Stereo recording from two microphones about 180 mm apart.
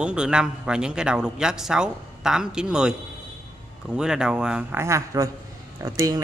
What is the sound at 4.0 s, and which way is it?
A man's voice, 5° right (ahead or behind).